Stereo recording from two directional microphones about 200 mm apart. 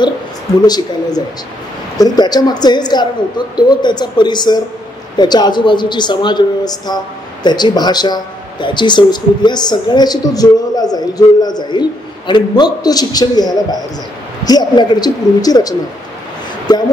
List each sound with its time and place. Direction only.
0.6 s speech: 20° left (ahead or behind)